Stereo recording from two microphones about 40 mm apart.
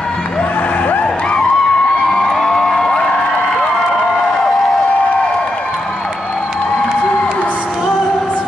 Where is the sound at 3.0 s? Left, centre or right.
Centre.